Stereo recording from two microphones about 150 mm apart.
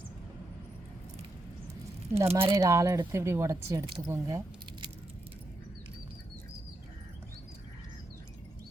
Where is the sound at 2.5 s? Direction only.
20° right (ahead or behind).